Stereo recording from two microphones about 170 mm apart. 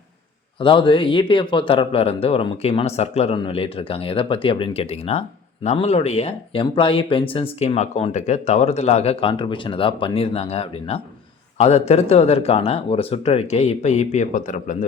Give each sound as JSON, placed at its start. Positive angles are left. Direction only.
{"t": 0.6, "sound": "speech", "side_deg": 30}